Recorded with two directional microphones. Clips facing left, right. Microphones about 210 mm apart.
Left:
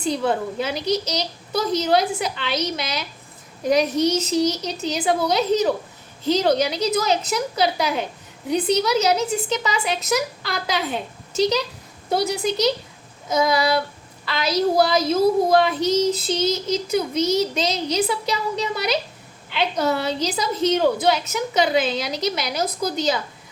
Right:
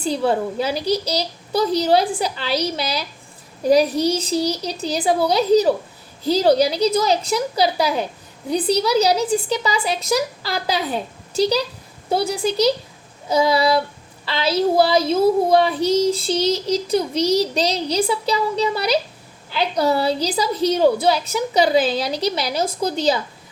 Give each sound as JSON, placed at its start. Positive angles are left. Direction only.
{"t": 0.0, "sound": "a woman's voice", "side_deg": -30}